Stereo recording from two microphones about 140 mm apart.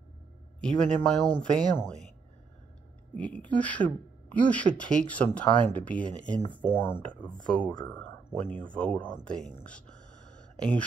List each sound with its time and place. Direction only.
0.6 s speech: 5° left (ahead or behind)
3.2 s speech: 10° left (ahead or behind)